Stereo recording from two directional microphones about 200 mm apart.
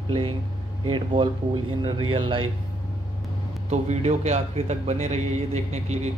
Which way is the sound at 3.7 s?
35° right (ahead or behind).